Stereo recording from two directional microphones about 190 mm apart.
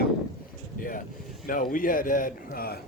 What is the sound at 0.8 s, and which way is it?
Speech, 45° left (ahead or behind).